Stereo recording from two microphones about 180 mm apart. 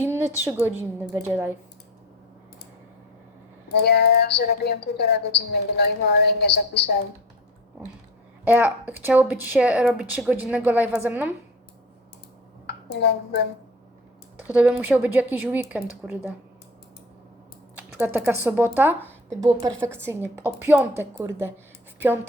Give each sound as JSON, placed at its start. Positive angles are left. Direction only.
{"t": 0.0, "sound": "a woman's voice", "side_deg": -15}
{"t": 3.8, "sound": "a woman's voice", "side_deg": 65}
{"t": 8.4, "sound": "speech", "side_deg": -10}
{"t": 12.6, "sound": "speech", "side_deg": 65}
{"t": 14.4, "sound": "speech", "side_deg": -5}
{"t": 17.7, "sound": "computer keyboard", "side_deg": -10}
{"t": 18.4, "sound": "speech", "side_deg": -10}